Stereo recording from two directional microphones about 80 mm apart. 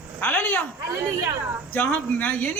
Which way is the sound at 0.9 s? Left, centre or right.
Right.